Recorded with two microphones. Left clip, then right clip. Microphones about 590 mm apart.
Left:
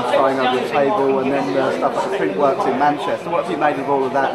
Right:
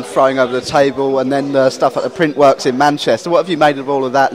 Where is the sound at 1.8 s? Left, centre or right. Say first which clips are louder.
Right 5 dB; right.